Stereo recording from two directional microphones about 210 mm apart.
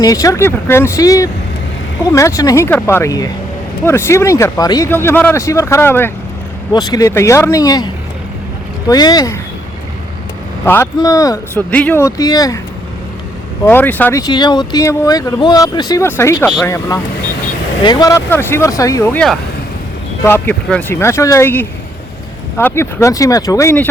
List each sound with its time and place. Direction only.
0.0 s speech: 15° left (ahead or behind)
8.9 s speech: 20° left (ahead or behind)
10.7 s speech: 15° left (ahead or behind)
13.7 s speech: 10° left (ahead or behind)